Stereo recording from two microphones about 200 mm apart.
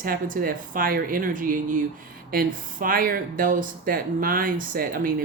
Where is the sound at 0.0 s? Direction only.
45° right (ahead or behind).